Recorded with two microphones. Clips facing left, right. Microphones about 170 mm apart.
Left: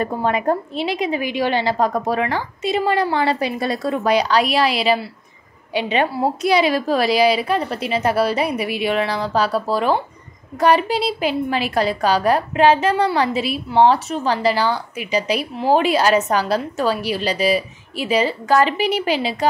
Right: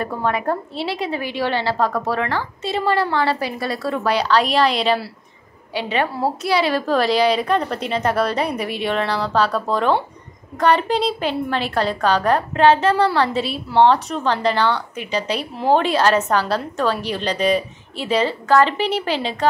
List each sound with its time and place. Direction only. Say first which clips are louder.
0.0 s a woman's voice: left 2 dB; 20° left (ahead or behind)